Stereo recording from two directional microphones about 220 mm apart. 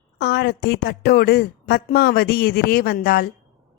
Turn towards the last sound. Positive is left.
turn(degrees=45)  # may be behind; listen again after turning